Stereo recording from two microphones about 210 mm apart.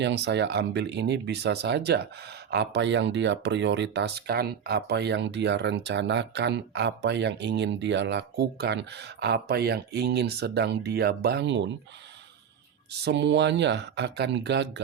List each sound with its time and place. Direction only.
0.0 s speech: 55° right (ahead or behind)
12.9 s speech: 50° right (ahead or behind)